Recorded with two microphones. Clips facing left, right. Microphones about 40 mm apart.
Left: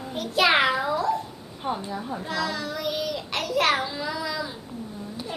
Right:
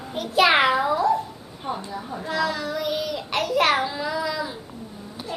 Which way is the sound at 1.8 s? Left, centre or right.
Centre.